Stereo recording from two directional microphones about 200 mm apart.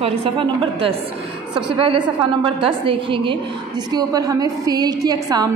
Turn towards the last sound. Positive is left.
turn(degrees=-20)  # may be behind; listen again after turning